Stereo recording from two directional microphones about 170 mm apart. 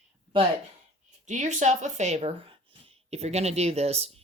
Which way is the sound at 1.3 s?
45° right (ahead or behind).